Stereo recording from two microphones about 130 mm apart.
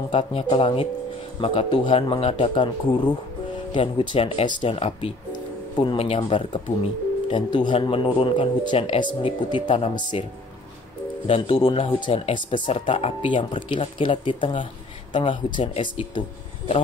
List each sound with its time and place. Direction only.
0.1 s speech: 45° left (ahead or behind)
4.1 s speech: 45° left (ahead or behind)
11.2 s speech: 40° left (ahead or behind)